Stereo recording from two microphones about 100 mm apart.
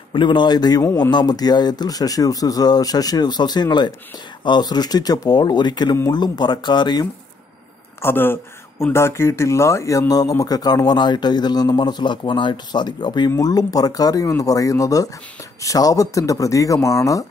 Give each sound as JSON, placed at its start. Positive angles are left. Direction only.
{"t": 0.1, "sound": "speech", "side_deg": 55}
{"t": 8.0, "sound": "speech", "side_deg": 20}